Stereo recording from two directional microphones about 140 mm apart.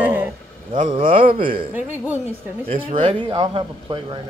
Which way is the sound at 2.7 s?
40° right (ahead or behind).